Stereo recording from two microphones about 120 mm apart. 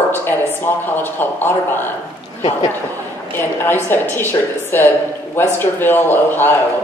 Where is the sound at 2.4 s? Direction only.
55° left (ahead or behind).